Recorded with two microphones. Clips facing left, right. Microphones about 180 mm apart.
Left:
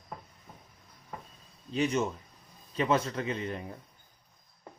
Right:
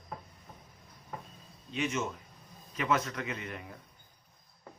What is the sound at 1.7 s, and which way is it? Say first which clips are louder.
A man's voice: left 5 dB; 35° left (ahead or behind).